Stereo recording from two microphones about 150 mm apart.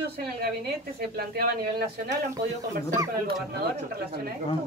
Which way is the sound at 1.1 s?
90° right.